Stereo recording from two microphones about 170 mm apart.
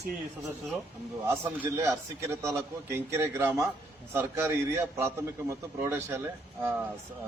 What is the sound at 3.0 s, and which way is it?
A man's voice, 15° right (ahead or behind).